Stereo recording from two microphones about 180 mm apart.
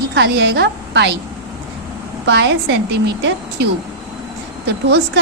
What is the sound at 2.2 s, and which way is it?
A woman's voice, 70° right (ahead or behind).